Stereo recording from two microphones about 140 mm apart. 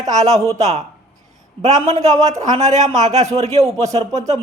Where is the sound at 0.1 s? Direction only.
55° right (ahead or behind).